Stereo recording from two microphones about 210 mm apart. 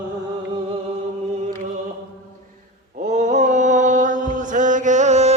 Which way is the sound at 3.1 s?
35° right (ahead or behind).